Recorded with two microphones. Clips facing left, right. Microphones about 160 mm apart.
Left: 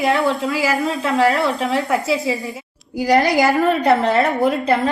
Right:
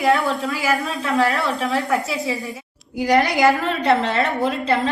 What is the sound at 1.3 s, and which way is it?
Speech, 20° left (ahead or behind).